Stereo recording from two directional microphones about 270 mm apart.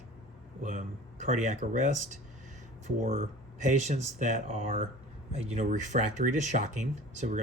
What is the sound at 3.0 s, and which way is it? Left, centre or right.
Speech, right.